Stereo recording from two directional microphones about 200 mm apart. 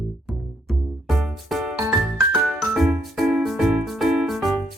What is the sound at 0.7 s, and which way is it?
Music, centre (ahead or behind).